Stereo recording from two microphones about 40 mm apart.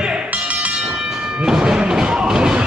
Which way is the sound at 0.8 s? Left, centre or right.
Right.